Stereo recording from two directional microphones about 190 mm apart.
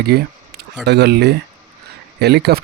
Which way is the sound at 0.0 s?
55° right (ahead or behind).